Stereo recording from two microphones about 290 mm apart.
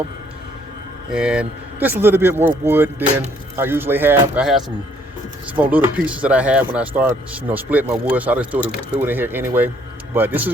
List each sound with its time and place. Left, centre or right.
1.1 s a man's voice: centre